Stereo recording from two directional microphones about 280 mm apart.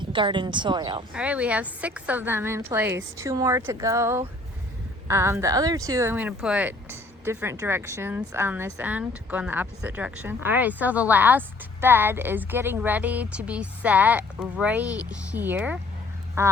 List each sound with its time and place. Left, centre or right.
0.0 s a woman's voice: centre
1.1 s a woman's voice: centre